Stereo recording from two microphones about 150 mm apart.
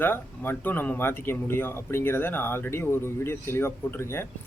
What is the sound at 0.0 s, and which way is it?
Speech, 15° left (ahead or behind).